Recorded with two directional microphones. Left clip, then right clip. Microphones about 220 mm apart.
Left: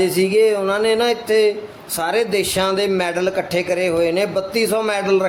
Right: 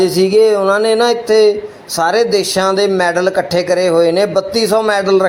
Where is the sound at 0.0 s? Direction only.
15° right (ahead or behind).